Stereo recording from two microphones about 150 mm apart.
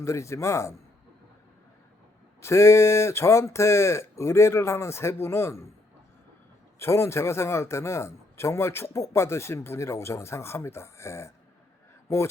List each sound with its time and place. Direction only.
0.0 s speech: 20° left (ahead or behind)
2.4 s a man's voice: 20° left (ahead or behind)
6.7 s a man's voice: 15° left (ahead or behind)